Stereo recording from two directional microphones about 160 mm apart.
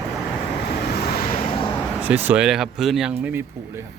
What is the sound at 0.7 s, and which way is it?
Vehicle, 85° left.